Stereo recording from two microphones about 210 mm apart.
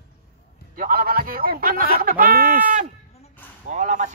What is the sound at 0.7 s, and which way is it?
A man's voice, 45° right (ahead or behind).